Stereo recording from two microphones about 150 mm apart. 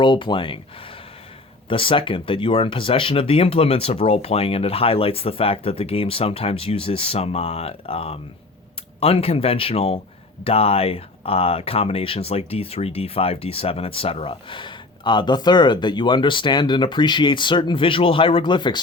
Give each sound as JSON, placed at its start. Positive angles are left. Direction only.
{"t": 0.0, "sound": "speech", "side_deg": 30}
{"t": 1.7, "sound": "speech", "side_deg": 35}